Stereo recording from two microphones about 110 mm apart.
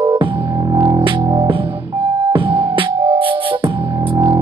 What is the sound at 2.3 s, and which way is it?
Music, 50° right (ahead or behind).